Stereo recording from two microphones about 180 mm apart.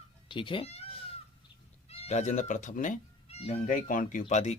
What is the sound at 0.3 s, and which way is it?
Speech, 30° left (ahead or behind).